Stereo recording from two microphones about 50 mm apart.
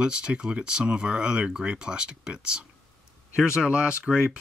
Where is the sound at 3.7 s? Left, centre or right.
Right.